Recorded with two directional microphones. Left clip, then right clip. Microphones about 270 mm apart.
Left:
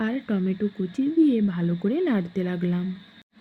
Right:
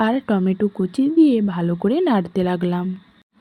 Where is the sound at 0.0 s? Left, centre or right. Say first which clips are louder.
Right 8 dB; right.